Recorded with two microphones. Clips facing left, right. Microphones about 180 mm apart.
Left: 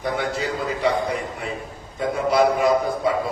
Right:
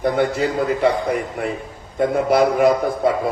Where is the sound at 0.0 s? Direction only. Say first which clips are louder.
Right 6 dB; 55° right (ahead or behind).